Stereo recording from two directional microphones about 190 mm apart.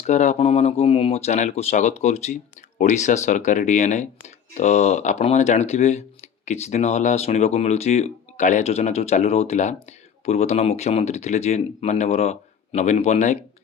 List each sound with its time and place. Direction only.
0.0 s speech: 35° left (ahead or behind)